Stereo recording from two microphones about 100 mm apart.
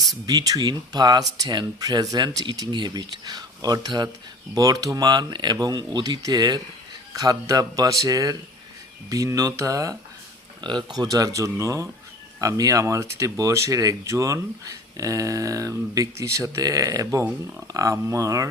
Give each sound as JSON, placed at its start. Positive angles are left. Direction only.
{"t": 0.1, "sound": "speech", "side_deg": -40}
{"t": 10.6, "sound": "speech", "side_deg": -50}